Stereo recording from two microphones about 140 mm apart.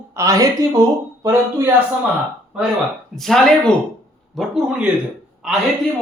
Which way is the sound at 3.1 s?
Centre (ahead or behind).